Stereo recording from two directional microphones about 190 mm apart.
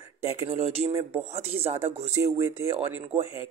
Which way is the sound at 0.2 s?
30° right (ahead or behind).